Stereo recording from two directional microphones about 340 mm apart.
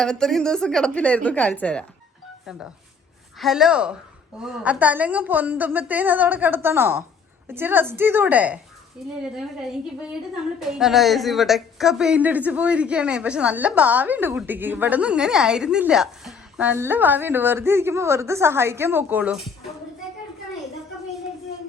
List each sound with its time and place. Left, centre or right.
0.0 s a woman's voice: centre
10.6 s a woman's voice: centre